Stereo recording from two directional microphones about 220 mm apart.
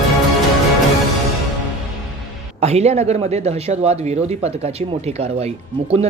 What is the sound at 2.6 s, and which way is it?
Speech, 30° right (ahead or behind).